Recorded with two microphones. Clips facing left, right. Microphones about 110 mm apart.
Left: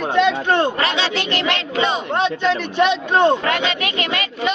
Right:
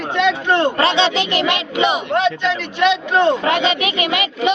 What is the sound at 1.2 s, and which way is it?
Speech, 15° right (ahead or behind).